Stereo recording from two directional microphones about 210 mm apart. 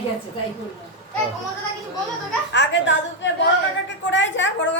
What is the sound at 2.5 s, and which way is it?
Speech, 55° left (ahead or behind).